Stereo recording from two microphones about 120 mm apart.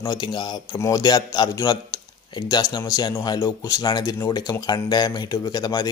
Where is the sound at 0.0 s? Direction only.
35° left (ahead or behind).